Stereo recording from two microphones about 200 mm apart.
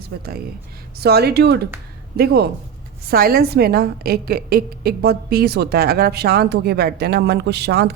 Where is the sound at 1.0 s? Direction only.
55° right (ahead or behind).